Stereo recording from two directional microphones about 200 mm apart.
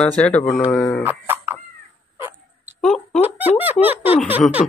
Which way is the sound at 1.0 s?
10° right (ahead or behind).